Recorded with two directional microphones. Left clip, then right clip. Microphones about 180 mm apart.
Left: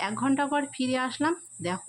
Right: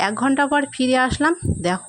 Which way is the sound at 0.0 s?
40° right (ahead or behind).